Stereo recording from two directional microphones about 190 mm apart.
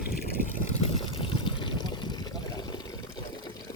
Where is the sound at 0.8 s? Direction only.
30° left (ahead or behind).